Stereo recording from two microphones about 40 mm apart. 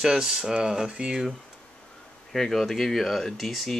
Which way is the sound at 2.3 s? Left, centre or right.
Centre.